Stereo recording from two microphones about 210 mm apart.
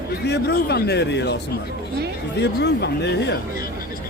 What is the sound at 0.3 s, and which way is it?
Speech, 50° left (ahead or behind).